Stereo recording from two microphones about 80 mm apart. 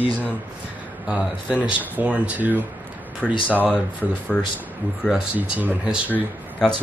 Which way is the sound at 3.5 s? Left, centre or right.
Left.